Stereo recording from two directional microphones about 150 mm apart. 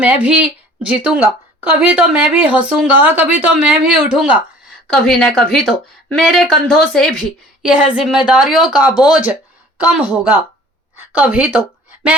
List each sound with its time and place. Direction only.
0.0 s a woman's voice: 10° right (ahead or behind)
4.9 s a woman's voice: 5° left (ahead or behind)